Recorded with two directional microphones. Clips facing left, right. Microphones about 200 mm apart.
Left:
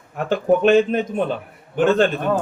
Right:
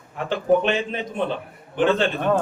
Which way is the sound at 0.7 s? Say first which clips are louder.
Left 9 dB; 45° left (ahead or behind).